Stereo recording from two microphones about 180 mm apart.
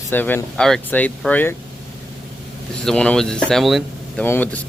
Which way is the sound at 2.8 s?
5° left (ahead or behind).